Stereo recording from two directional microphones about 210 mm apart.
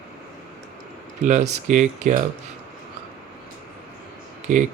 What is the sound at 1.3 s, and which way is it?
Speech, 35° right (ahead or behind).